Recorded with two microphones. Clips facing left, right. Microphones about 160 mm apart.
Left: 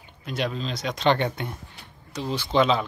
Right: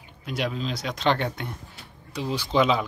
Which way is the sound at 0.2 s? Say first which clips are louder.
Even; 5° right (ahead or behind).